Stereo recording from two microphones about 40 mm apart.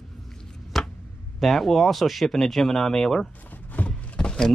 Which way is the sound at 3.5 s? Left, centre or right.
Left.